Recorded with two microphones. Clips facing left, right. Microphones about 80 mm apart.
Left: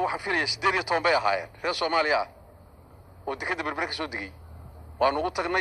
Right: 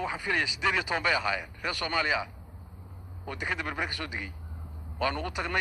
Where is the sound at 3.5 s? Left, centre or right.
Left.